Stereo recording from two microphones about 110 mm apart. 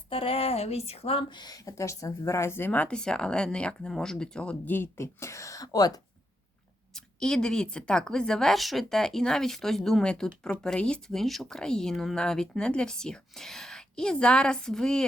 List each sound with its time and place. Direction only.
0.1 s speech: 55° left (ahead or behind)
1.3 s speech: 40° left (ahead or behind)
6.9 s a woman's voice: 5° left (ahead or behind)